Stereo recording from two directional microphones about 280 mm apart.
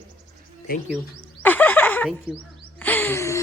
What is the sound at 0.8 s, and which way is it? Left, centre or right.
Speech, centre.